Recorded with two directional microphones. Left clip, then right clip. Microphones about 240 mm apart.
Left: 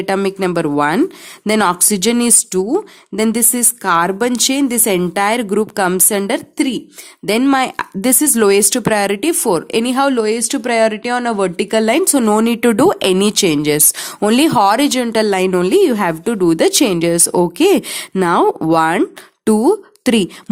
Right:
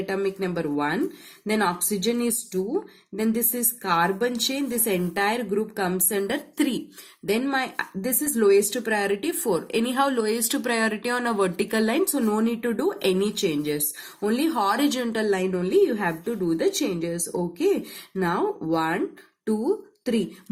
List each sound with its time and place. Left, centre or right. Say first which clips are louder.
0.0 s a woman's voice: left 10 dB; left